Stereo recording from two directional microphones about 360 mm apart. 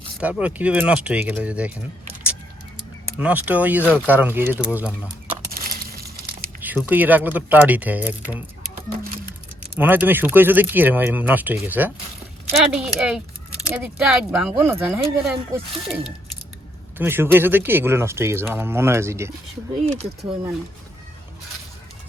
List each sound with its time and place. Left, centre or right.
0.2 s speech: centre
3.2 s speech: centre
5.5 s a sound: right
6.6 s speech: centre
9.7 s speech: centre
17.0 s speech: centre
19.8 s speech: centre